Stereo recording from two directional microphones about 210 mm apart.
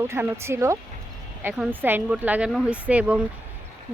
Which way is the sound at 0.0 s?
10° right (ahead or behind).